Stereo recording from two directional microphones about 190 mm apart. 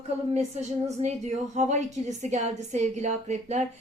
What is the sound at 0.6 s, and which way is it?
A woman's voice, 35° right (ahead or behind).